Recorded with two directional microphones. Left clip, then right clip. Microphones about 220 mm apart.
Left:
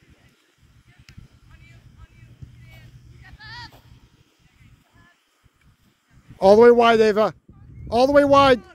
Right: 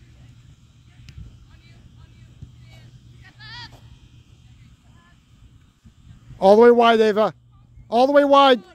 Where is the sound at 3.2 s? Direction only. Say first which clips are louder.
Even; 50° right (ahead or behind).